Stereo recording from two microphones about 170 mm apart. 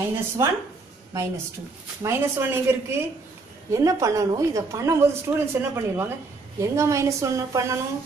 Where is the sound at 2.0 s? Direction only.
15° right (ahead or behind).